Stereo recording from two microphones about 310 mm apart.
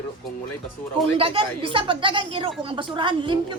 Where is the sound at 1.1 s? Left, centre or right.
Centre.